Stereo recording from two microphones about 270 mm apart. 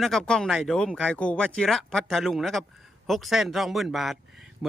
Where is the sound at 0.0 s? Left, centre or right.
Centre.